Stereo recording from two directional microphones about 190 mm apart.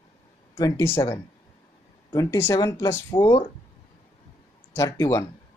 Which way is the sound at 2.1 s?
15° left (ahead or behind).